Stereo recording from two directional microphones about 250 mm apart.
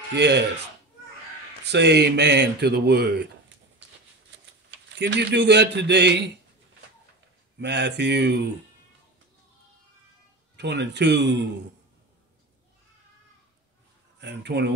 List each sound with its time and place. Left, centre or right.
0.1 s speech: right
1.6 s speech: right
4.6 s a man's voice: right
7.6 s speech: right
10.5 s speech: right
14.2 s speech: right